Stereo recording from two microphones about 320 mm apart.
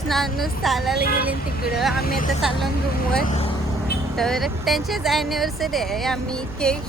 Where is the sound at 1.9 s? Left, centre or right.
Left.